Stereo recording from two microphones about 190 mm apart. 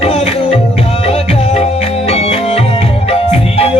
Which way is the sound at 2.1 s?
35° left (ahead or behind).